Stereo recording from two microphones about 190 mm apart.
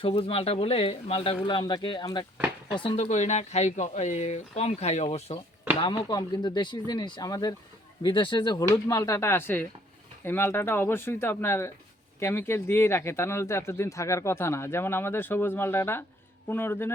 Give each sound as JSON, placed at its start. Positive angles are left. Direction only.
{"t": 0.0, "sound": "speech", "side_deg": 30}
{"t": 5.8, "sound": "speech", "side_deg": 20}